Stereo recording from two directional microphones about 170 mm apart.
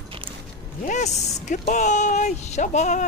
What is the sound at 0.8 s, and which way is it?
Speech, 45° left (ahead or behind).